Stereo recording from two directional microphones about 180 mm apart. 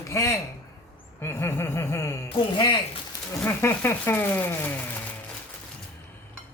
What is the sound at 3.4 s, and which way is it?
Speech, 10° left (ahead or behind).